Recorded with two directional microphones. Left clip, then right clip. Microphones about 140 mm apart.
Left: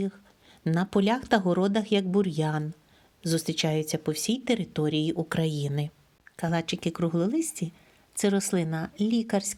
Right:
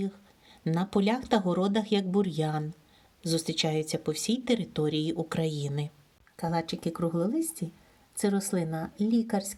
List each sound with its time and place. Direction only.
0.6 s a woman's voice: 25° left (ahead or behind)